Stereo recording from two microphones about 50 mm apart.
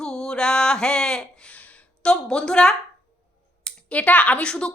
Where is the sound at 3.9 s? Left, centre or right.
Left.